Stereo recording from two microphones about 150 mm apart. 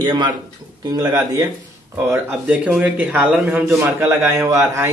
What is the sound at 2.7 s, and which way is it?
A man's voice, 10° right (ahead or behind).